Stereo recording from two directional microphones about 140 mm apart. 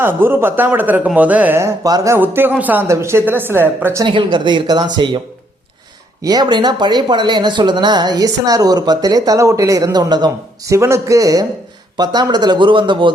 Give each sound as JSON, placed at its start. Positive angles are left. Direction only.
{"t": 0.0, "sound": "speech", "side_deg": -15}
{"t": 4.0, "sound": "speech", "side_deg": -35}
{"t": 6.2, "sound": "speech", "side_deg": -30}